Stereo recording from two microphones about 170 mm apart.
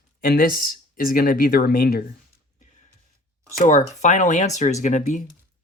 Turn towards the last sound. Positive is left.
turn(degrees=45)  # may be behind; listen again after turning